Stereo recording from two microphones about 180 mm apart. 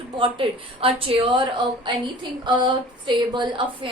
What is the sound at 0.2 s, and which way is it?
A woman's voice, 30° right (ahead or behind).